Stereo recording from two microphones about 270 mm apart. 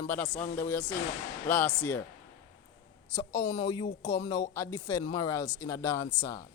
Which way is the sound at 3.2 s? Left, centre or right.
Centre.